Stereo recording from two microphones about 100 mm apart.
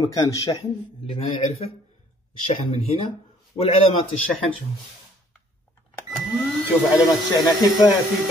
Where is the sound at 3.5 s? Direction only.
90° left.